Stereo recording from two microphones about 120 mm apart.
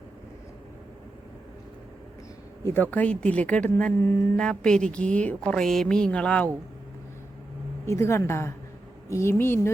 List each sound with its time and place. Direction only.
2.6 s speech: 15° left (ahead or behind)
7.9 s speech: 20° left (ahead or behind)